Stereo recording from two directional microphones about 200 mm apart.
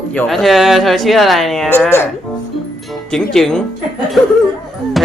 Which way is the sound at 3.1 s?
Centre (ahead or behind).